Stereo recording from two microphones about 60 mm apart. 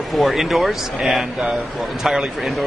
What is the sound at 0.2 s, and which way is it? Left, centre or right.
A man's voice, centre.